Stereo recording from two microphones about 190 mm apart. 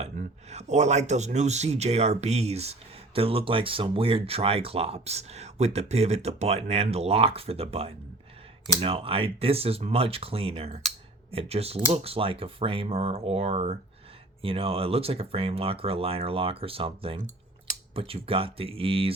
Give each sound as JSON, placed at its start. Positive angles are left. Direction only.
{"t": 0.0, "sound": "speech", "side_deg": -35}